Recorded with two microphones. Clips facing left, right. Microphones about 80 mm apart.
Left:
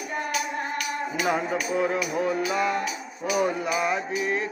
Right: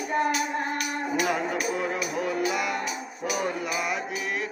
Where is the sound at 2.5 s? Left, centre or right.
Left.